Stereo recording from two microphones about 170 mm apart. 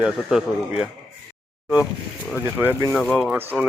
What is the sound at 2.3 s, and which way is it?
Speech, 10° right (ahead or behind).